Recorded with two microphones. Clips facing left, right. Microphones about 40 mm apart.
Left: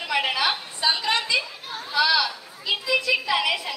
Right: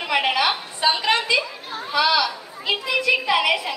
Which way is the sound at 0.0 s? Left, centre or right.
Right.